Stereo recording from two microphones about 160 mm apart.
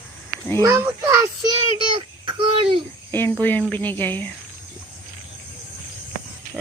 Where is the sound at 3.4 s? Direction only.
10° left (ahead or behind).